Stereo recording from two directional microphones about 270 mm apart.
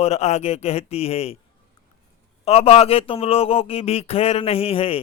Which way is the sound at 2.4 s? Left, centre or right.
Left.